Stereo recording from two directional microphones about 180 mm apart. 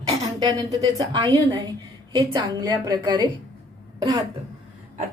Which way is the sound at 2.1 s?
25° right (ahead or behind).